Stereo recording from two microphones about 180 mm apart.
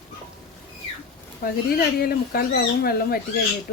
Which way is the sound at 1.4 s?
55° left (ahead or behind).